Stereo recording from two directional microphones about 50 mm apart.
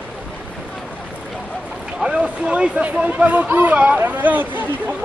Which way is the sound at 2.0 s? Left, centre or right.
Centre.